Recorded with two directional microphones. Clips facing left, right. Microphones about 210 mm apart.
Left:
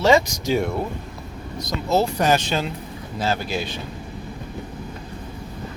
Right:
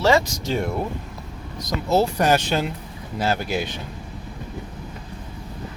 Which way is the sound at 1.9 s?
10° right (ahead or behind).